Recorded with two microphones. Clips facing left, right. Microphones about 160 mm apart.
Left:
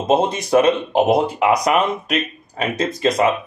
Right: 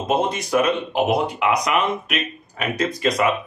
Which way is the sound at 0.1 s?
30° left (ahead or behind).